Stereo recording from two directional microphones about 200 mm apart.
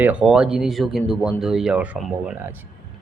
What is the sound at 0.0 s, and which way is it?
Speech, 5° right (ahead or behind).